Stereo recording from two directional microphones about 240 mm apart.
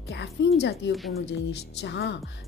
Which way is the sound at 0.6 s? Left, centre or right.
Left.